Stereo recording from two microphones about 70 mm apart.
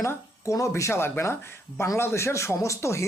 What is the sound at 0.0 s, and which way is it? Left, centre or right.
Speech, left.